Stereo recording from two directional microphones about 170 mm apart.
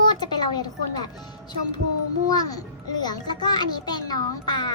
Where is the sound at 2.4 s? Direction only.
20° left (ahead or behind).